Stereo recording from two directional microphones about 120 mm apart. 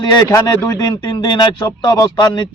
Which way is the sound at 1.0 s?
40° left (ahead or behind).